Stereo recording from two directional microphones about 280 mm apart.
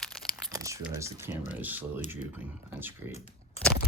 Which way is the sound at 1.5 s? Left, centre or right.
Centre.